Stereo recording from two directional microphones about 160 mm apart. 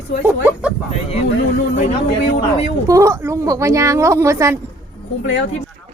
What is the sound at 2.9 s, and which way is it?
A woman's voice, 20° right (ahead or behind).